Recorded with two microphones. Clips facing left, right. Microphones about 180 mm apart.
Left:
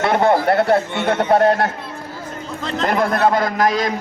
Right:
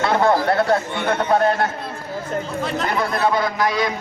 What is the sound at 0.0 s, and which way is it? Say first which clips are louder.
Speech: left 2 dB; 25° left (ahead or behind).